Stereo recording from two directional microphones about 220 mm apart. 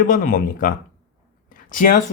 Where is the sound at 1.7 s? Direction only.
40° left (ahead or behind).